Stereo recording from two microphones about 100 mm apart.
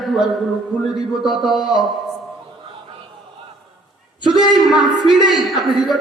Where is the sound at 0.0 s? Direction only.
Centre (ahead or behind).